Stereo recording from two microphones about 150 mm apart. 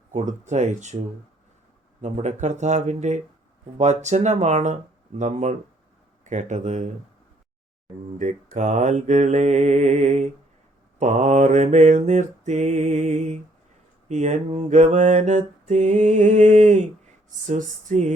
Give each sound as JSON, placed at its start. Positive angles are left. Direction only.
{"t": 0.1, "sound": "mantra", "side_deg": -55}
{"t": 2.0, "sound": "mantra", "side_deg": -50}
{"t": 8.2, "sound": "mantra", "side_deg": -55}